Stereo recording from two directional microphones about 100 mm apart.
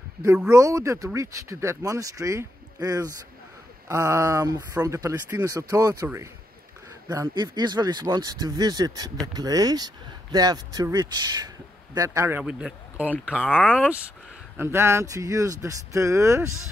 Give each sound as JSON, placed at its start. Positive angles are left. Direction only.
{"t": 0.5, "sound": "speech", "side_deg": -35}
{"t": 7.1, "sound": "speech", "side_deg": -35}
{"t": 7.5, "sound": "speech", "side_deg": -45}
{"t": 12.4, "sound": "speech", "side_deg": -15}
{"t": 13.4, "sound": "speech", "side_deg": 15}
{"t": 13.7, "sound": "speech", "side_deg": -10}
{"t": 14.6, "sound": "speech", "side_deg": -25}